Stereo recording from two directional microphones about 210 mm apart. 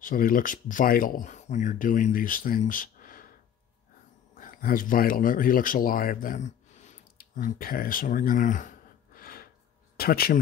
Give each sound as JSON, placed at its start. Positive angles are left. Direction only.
{"t": 0.0, "sound": "speech", "side_deg": 40}
{"t": 4.4, "sound": "speech", "side_deg": 45}